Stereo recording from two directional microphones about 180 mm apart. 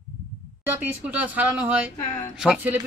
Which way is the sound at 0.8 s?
10° right (ahead or behind).